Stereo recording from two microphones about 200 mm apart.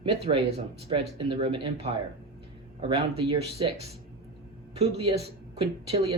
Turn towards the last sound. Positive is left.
turn(degrees=-25)  # may be behind; listen again after turning